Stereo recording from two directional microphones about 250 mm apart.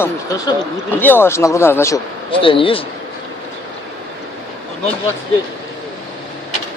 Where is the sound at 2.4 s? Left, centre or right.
Left.